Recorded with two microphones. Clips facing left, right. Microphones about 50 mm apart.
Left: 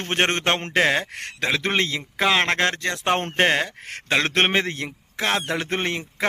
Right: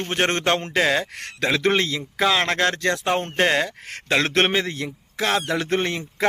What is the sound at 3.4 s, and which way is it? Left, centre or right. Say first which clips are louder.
A man's voice: even; left.